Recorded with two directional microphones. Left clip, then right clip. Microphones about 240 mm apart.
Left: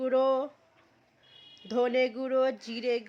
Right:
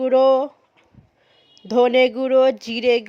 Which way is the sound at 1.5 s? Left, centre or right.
Right.